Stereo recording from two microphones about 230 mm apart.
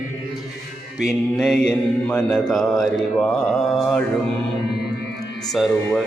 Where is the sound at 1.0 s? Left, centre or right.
Centre.